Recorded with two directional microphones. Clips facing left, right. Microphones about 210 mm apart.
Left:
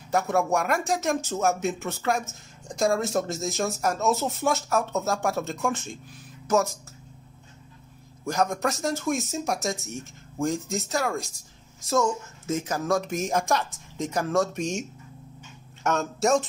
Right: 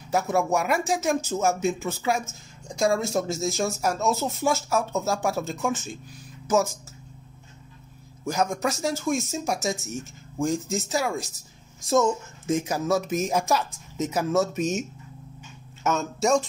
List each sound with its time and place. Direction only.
0.1 s speech: centre (ahead or behind)
8.3 s speech: centre (ahead or behind)
11.9 s speech: 15° right (ahead or behind); by 16.4 s centre (ahead or behind)